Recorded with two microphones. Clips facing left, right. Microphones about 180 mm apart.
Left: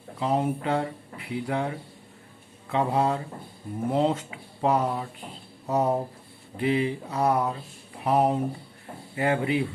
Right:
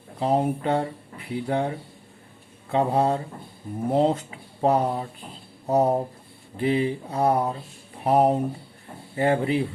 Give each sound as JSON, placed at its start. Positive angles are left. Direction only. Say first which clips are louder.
{"t": 0.2, "sound": "speech", "louder": "right 3 dB", "side_deg": -35}